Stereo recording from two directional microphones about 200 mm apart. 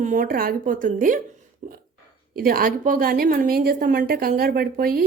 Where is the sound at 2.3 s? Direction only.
45° right (ahead or behind).